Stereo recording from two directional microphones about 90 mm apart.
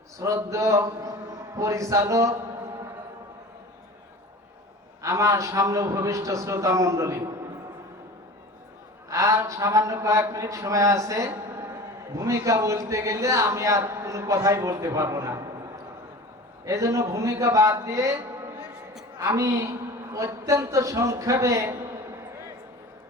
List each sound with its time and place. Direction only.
0.2 s a man's voice: 35° right (ahead or behind)
5.0 s a man's voice: 35° right (ahead or behind)
9.0 s a man's voice: 35° right (ahead or behind)
16.6 s a man's voice: 35° right (ahead or behind)
19.4 s a man's voice: 35° right (ahead or behind)